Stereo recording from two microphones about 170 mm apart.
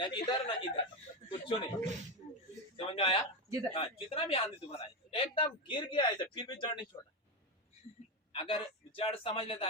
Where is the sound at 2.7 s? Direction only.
35° left (ahead or behind).